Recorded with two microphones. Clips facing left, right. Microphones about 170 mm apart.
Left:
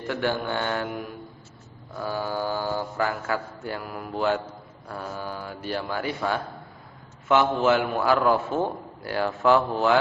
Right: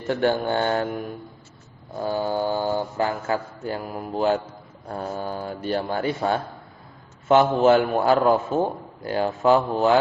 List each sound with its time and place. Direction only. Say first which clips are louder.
0.1 s a man's voice: right 5 dB; 30° right (ahead or behind)
0.4 s mantra: right 5 dB; 35° right (ahead or behind)
1.9 s a man's voice: right 4 dB; 25° right (ahead or behind)